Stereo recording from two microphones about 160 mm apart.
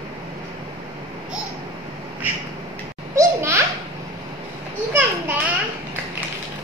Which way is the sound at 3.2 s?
15° right (ahead or behind).